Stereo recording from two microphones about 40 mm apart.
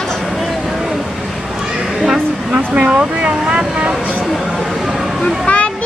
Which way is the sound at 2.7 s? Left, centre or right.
Right.